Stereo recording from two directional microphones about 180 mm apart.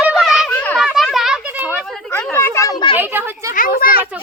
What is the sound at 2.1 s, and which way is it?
Speech, 10° left (ahead or behind).